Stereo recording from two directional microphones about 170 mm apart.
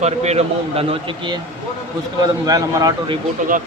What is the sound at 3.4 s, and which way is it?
Speech, 50° right (ahead or behind).